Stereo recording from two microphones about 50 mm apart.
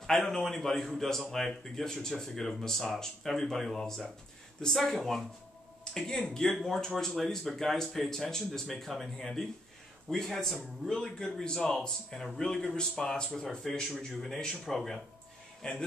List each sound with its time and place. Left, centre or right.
0.0 s speech: centre
15.6 s speech: centre